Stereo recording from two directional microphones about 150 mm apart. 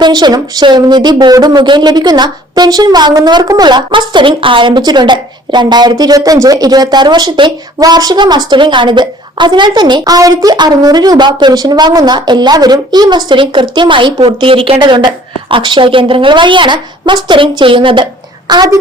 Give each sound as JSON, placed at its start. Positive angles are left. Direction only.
{"t": 0.0, "sound": "a woman's voice", "side_deg": -30}